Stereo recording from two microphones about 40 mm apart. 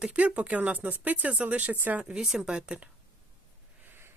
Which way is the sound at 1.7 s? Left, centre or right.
Right.